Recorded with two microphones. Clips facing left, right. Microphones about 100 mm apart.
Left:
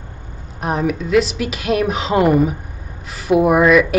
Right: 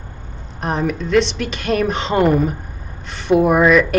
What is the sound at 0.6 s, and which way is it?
Speech, 5° left (ahead or behind).